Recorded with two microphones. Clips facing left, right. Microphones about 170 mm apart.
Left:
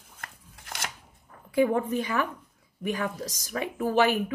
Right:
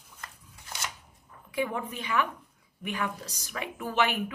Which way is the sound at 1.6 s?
40° left (ahead or behind).